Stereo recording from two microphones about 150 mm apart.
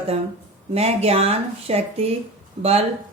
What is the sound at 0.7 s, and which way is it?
Speech, 45° right (ahead or behind).